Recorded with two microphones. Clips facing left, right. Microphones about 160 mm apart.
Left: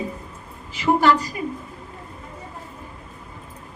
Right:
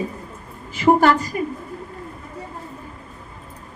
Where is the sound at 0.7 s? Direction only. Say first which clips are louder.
Right 3 dB; 50° right (ahead or behind).